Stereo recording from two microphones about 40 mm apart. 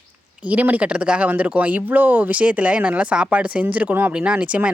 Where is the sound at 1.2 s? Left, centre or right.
Right.